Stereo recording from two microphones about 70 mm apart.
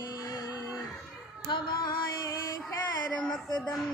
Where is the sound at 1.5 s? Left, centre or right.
Left.